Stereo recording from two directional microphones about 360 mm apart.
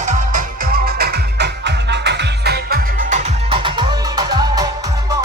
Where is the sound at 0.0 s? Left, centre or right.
Right.